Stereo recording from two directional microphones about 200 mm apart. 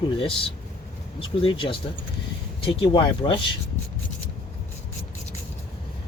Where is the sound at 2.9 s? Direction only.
25° left (ahead or behind).